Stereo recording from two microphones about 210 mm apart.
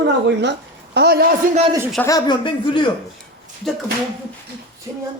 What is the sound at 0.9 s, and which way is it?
Speech, 50° right (ahead or behind).